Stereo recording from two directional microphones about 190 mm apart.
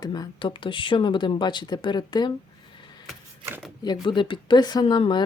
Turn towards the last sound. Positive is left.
turn(degrees=25)  # may be behind; listen again after turning